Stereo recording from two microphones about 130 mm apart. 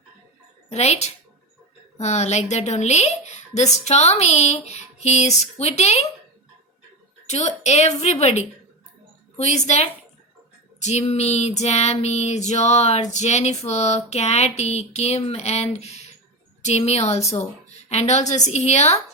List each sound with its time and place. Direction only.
0.7 s female singing: 60° left (ahead or behind)
7.3 s female singing: 60° left (ahead or behind)